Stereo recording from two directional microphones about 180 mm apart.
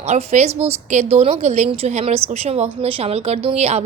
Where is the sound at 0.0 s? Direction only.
35° right (ahead or behind).